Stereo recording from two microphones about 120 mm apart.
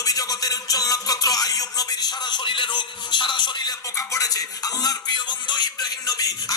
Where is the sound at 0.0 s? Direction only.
30° left (ahead or behind).